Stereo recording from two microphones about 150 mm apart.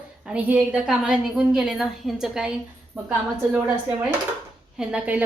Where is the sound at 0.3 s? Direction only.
10° right (ahead or behind).